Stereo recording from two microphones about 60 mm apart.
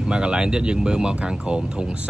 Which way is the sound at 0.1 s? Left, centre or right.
Centre.